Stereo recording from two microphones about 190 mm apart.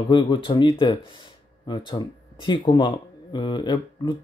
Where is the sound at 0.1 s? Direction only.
25° left (ahead or behind).